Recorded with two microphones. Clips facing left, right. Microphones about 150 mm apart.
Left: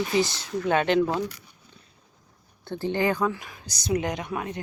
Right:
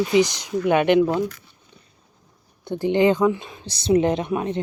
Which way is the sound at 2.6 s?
15° right (ahead or behind).